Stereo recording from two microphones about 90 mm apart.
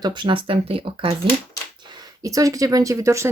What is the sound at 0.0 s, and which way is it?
Speech, 60° right (ahead or behind).